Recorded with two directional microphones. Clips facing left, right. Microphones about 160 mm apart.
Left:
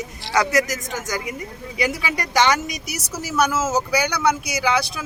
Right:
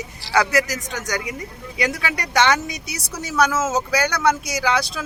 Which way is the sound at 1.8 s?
10° left (ahead or behind).